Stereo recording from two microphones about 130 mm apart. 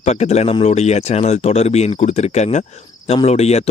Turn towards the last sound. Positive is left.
turn(degrees=55)  # may be behind; listen again after turning